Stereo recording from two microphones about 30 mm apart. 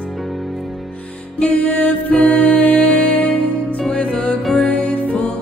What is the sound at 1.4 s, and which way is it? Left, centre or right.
Music, left.